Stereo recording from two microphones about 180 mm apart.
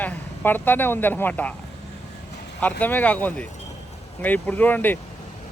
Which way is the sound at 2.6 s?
10° left (ahead or behind).